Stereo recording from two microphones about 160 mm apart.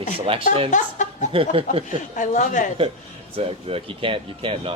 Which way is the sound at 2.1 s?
55° left (ahead or behind).